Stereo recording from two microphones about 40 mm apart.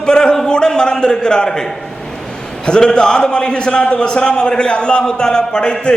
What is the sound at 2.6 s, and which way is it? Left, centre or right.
A man's voice, left.